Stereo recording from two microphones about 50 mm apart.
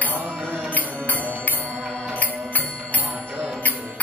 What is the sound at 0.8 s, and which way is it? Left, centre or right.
Music, left.